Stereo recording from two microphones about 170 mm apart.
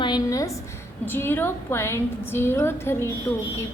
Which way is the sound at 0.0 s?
25° left (ahead or behind).